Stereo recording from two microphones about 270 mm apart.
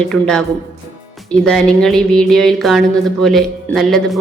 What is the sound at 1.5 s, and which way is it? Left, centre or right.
Speech, centre.